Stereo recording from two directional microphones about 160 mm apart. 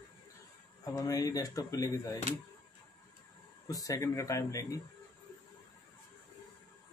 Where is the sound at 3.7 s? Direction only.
20° left (ahead or behind).